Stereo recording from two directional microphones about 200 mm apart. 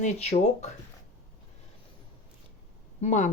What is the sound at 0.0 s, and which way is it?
Speech, 35° left (ahead or behind).